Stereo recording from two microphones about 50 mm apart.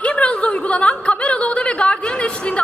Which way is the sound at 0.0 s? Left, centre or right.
Left.